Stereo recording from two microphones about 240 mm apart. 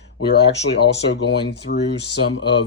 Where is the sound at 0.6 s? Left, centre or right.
Left.